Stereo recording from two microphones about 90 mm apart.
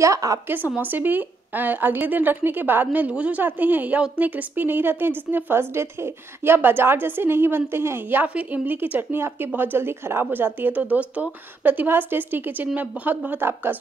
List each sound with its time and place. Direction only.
0.0 s a woman's voice: 40° right (ahead or behind)
0.5 s a woman's voice: 20° right (ahead or behind)